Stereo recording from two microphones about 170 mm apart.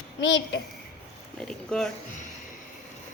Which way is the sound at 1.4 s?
5° left (ahead or behind).